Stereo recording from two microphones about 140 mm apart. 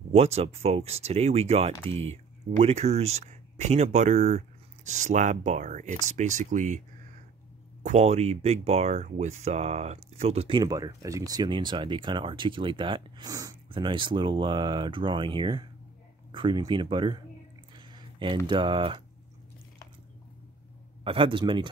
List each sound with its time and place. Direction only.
0.1 s speech: 50° right (ahead or behind); by 6.8 s 65° right (ahead or behind)
7.8 s speech: 55° right (ahead or behind)
10.6 s speech: 25° right (ahead or behind)
17.7 s a sound: 35° right (ahead or behind)
18.5 s speech: 35° right (ahead or behind)
21.0 s speech: 40° right (ahead or behind)